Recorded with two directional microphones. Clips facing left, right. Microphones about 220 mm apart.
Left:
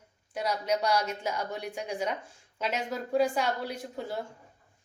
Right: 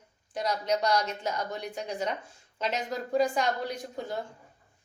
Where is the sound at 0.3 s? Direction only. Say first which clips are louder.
Right 1 dB; 10° left (ahead or behind).